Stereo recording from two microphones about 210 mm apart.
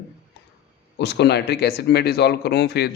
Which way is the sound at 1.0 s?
55° left (ahead or behind).